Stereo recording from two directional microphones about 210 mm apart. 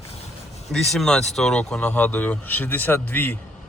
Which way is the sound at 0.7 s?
Centre (ahead or behind).